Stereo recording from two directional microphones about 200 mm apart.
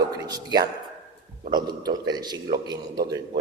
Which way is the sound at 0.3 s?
20° right (ahead or behind).